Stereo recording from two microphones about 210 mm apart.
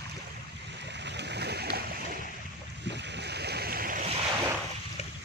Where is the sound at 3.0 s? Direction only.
55° right (ahead or behind).